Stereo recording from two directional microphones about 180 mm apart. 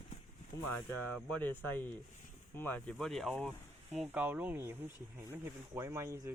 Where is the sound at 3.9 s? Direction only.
10° right (ahead or behind).